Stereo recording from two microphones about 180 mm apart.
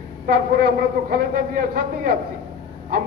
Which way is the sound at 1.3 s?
55° right (ahead or behind).